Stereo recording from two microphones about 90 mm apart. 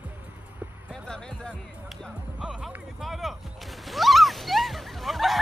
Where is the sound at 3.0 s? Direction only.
Centre (ahead or behind).